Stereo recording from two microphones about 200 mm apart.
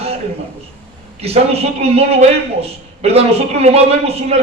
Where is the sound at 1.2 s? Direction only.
30° right (ahead or behind).